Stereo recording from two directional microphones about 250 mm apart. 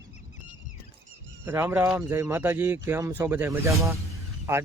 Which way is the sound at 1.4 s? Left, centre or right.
Centre.